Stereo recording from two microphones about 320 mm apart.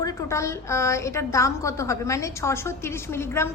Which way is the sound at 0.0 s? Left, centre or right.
Centre.